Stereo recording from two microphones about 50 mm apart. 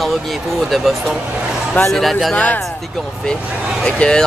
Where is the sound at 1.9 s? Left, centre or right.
Centre.